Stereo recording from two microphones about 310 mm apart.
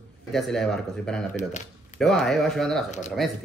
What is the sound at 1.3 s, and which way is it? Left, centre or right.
Speech, left.